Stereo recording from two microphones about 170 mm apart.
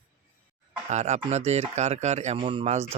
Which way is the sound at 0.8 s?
40° right (ahead or behind).